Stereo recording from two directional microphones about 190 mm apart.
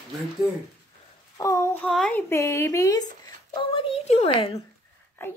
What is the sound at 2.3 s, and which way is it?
Speech, 15° left (ahead or behind).